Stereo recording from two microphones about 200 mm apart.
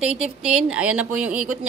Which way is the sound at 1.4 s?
90° right.